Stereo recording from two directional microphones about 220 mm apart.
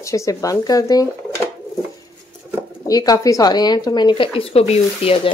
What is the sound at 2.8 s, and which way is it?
Speech, 15° left (ahead or behind).